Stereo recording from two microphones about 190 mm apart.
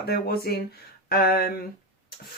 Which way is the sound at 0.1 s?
55° left (ahead or behind).